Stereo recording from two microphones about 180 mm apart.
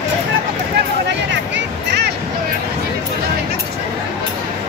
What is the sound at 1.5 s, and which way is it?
Music, 70° right (ahead or behind).